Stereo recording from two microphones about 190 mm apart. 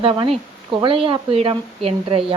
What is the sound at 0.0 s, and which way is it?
Speech, 30° right (ahead or behind).